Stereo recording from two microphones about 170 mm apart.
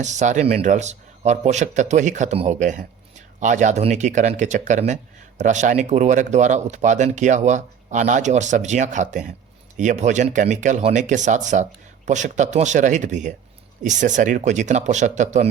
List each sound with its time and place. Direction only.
0.0 s speech: 45° right (ahead or behind)